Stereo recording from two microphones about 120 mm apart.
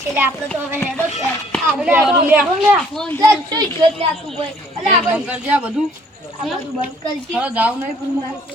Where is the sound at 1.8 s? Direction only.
15° right (ahead or behind).